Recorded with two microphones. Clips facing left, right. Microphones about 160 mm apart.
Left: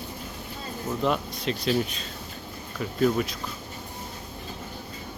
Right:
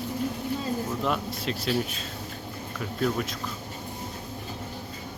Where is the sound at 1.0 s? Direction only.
Centre (ahead or behind).